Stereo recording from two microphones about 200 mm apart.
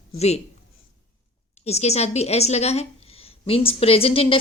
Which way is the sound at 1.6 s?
30° left (ahead or behind).